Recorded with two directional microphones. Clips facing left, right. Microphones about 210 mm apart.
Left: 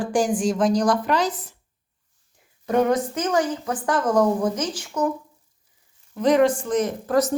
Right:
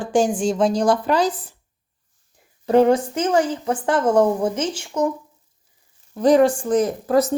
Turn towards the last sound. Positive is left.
turn(degrees=-30)  # may be behind; listen again after turning